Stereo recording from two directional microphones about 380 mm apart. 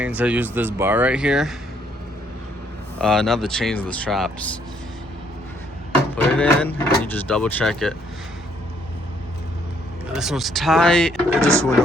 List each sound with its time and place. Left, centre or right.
0.0 s speech: centre
3.0 s speech: centre
6.1 s a sound: centre
7.0 s speech: centre
10.1 s speech: centre